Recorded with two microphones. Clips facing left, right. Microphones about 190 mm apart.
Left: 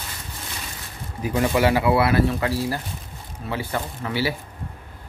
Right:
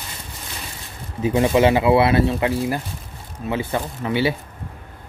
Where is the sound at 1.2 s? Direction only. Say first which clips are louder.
Right 4 dB; 25° right (ahead or behind).